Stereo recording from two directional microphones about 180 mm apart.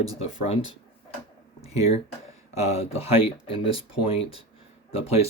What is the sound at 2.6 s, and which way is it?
Speech, 35° left (ahead or behind).